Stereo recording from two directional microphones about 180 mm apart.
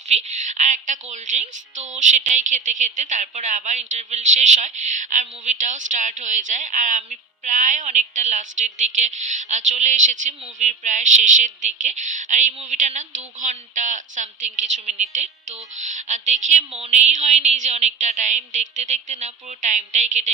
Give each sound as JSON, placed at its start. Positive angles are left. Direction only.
{"t": 0.1, "sound": "a woman's voice", "side_deg": -40}